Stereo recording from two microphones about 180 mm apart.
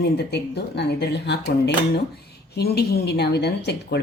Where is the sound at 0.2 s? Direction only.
70° left (ahead or behind).